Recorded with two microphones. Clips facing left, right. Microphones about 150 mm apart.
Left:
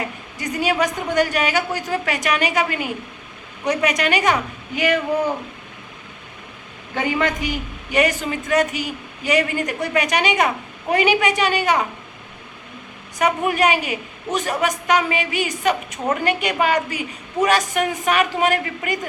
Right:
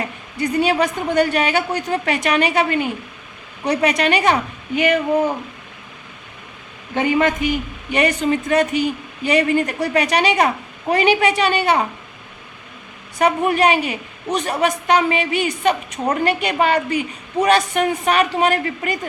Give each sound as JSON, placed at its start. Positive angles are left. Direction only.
{"t": 0.3, "sound": "a woman's voice", "side_deg": -30}
{"t": 6.9, "sound": "a woman's voice", "side_deg": -20}
{"t": 13.1, "sound": "a woman's voice", "side_deg": -30}